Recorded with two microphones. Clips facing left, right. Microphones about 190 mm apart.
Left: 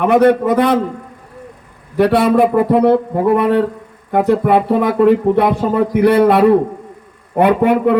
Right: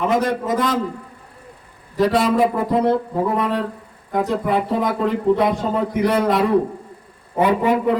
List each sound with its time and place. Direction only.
0.0 s speech: 65° left (ahead or behind)
2.0 s speech: 65° left (ahead or behind)